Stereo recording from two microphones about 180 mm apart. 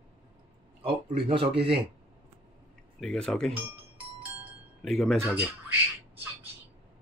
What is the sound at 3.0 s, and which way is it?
Speech, 5° left (ahead or behind).